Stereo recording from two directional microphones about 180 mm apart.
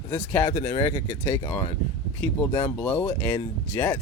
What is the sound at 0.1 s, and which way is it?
Speech, 15° left (ahead or behind).